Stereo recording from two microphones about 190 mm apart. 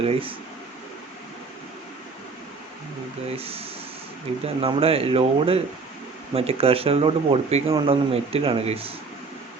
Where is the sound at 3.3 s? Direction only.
30° right (ahead or behind).